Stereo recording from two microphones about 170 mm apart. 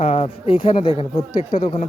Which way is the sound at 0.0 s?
35° left (ahead or behind).